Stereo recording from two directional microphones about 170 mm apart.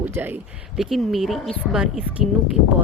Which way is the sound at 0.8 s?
Centre (ahead or behind).